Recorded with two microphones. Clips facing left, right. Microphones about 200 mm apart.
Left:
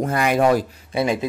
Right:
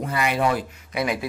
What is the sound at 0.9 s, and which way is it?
Speech, 25° left (ahead or behind).